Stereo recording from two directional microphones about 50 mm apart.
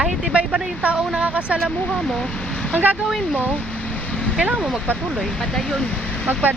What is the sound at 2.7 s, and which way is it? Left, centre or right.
Speech, right.